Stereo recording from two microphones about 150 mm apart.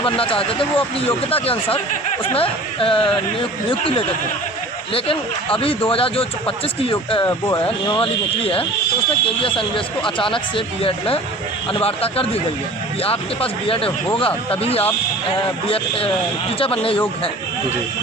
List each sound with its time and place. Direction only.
0.0 s speech: 35° left (ahead or behind)
7.3 s speech: 20° left (ahead or behind)
7.9 s speech: 35° left (ahead or behind)